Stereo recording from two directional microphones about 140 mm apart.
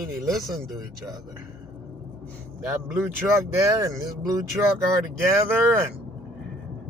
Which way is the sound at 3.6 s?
25° right (ahead or behind).